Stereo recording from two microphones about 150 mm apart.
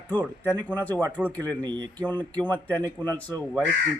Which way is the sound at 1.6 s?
30° right (ahead or behind).